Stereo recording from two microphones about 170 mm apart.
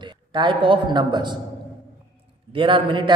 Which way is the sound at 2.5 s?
30° right (ahead or behind).